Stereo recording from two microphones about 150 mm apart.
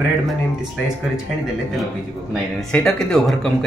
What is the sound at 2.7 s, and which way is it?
Speech, 5° left (ahead or behind).